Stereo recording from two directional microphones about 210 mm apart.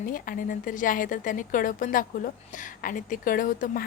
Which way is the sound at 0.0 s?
40° left (ahead or behind).